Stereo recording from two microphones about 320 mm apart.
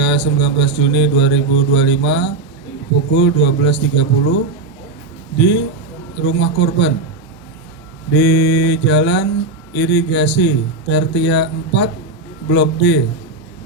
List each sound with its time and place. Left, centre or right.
0.0 s mantra: left
5.4 s mantra: left
8.1 s mantra: left